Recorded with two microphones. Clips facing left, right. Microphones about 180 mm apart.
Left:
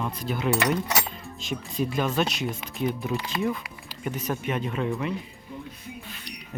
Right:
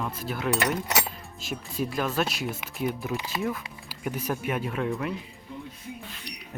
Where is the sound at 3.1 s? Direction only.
15° right (ahead or behind); by 5.1 s centre (ahead or behind).